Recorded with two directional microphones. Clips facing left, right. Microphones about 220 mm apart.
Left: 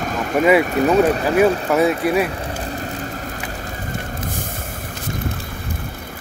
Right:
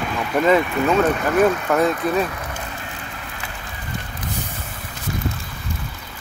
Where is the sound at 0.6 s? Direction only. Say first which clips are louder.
Left 4 dB; 40° left (ahead or behind).